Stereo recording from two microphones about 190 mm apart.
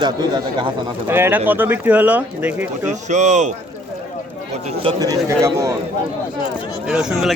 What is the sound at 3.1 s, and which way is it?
Speech, 40° right (ahead or behind).